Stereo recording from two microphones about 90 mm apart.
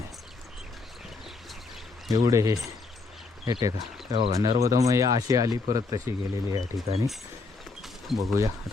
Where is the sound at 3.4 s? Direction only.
50° right (ahead or behind).